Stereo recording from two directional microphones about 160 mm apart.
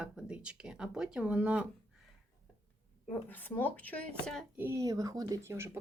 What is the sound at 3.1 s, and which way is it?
Speech, 10° left (ahead or behind).